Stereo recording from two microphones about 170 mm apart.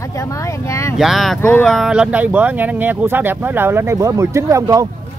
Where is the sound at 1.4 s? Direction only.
15° left (ahead or behind).